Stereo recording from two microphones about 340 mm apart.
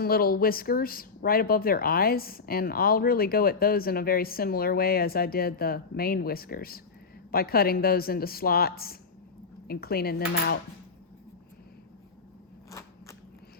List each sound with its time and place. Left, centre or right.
0.0 s speech: left